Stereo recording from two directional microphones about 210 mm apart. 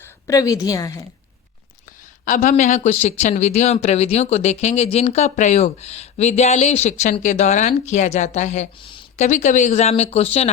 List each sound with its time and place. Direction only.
0.0 s a woman's voice: 15° left (ahead or behind)
2.2 s speech: 40° left (ahead or behind)